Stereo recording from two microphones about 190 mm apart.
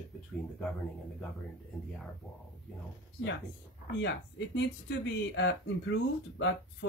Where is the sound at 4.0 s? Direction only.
65° left (ahead or behind).